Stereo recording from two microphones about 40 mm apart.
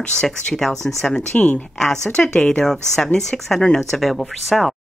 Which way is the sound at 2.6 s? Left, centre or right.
Centre.